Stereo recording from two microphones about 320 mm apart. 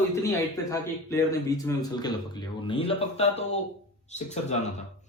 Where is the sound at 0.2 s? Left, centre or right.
Centre.